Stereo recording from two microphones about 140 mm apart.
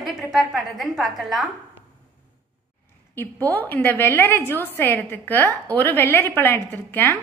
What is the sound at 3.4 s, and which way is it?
A woman's voice, 10° left (ahead or behind).